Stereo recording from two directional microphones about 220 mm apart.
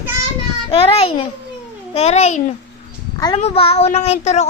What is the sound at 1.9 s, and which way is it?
A child's voice, 30° left (ahead or behind).